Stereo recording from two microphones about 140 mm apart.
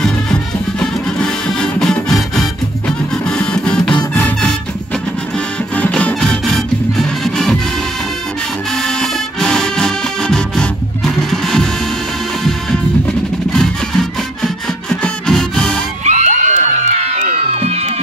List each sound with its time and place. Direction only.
0.0 s music: 5° left (ahead or behind)
5.8 s music: 10° left (ahead or behind)
8.7 s music: 5° left (ahead or behind)
13.5 s music: 5° left (ahead or behind)
16.0 s music: 55° right (ahead or behind)